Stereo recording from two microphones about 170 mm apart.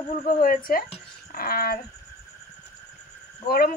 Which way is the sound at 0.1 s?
50° left (ahead or behind).